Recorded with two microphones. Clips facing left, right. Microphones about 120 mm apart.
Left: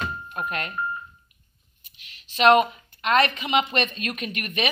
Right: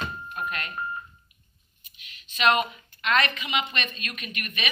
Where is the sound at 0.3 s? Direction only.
50° left (ahead or behind).